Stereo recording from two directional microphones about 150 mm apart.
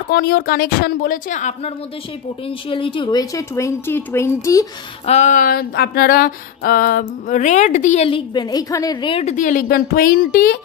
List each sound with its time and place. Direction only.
0.1 s a woman's voice: 90° left; by 1.7 s 55° left (ahead or behind)
2.4 s a woman's voice: 35° left (ahead or behind)
5.0 s a sound: 50° left (ahead or behind)
8.1 s a woman's voice: 30° left (ahead or behind)
9.1 s a woman's voice: 50° left (ahead or behind); by 10.6 s 85° left